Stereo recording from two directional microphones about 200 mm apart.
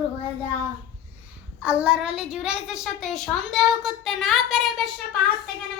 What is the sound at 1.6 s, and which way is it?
A woman's voice, 5° right (ahead or behind).